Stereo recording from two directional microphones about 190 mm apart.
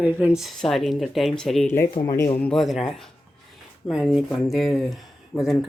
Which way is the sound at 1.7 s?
15° left (ahead or behind).